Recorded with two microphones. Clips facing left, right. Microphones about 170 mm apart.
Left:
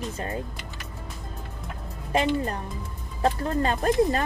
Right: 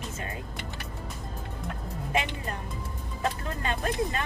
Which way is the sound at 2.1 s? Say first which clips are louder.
Left 7 dB; 40° left (ahead or behind).